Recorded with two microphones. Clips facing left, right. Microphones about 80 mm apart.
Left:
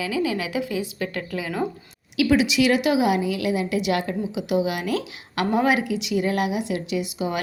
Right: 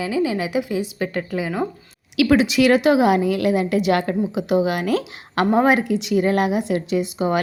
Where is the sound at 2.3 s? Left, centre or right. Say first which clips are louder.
Right 4 dB; right.